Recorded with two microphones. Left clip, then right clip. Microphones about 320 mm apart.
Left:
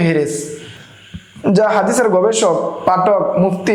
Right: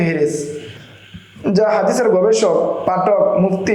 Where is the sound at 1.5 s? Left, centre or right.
Left.